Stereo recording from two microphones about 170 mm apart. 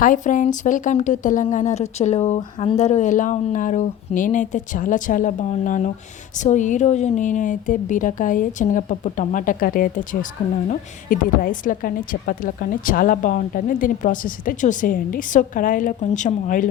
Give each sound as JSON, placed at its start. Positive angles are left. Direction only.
{"t": 0.0, "sound": "a woman's voice", "side_deg": 50}